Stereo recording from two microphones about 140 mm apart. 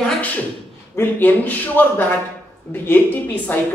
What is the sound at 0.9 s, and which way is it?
Speech, 15° left (ahead or behind).